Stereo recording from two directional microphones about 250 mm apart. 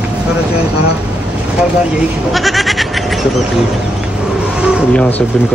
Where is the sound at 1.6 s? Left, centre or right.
Centre.